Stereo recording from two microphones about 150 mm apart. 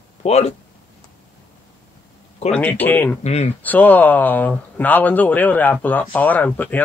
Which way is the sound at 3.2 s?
45° left (ahead or behind).